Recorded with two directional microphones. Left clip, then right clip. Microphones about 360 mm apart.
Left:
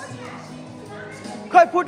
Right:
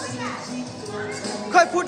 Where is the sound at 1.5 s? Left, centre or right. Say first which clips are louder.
Left 3 dB; centre.